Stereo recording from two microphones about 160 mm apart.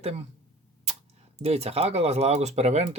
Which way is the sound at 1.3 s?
40° right (ahead or behind).